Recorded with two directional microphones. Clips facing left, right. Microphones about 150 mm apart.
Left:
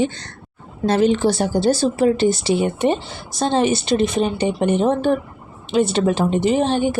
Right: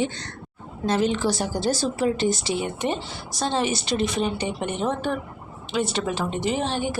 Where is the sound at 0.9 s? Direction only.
65° left (ahead or behind).